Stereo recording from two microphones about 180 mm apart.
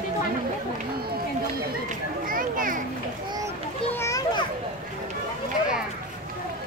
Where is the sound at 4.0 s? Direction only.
20° left (ahead or behind).